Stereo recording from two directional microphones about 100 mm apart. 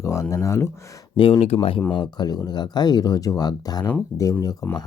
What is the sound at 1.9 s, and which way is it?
Speech, 45° left (ahead or behind).